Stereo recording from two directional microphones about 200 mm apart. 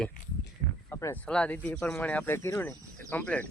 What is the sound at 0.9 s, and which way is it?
Speech, 15° left (ahead or behind).